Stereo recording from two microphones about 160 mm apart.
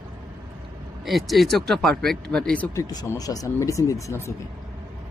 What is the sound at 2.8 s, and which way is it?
Speech, 20° left (ahead or behind).